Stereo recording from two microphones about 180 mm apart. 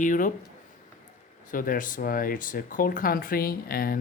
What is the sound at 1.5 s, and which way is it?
Speech, 50° left (ahead or behind).